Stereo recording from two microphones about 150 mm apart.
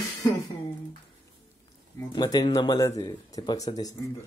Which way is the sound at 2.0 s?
25° left (ahead or behind).